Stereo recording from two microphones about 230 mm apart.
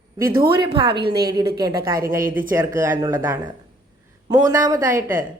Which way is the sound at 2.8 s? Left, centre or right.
Centre.